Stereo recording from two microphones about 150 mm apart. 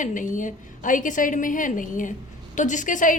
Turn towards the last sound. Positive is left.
turn(degrees=60)  # may be behind; listen again after turning